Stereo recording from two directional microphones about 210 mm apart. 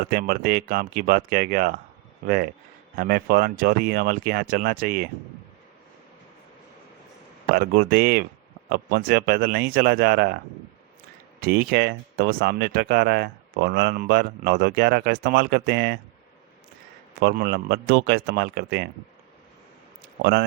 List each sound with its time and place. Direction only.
0.0 s speech: 45° right (ahead or behind)
7.5 s speech: 50° right (ahead or behind)
11.3 s speech: 45° right (ahead or behind)
17.2 s speech: 50° right (ahead or behind)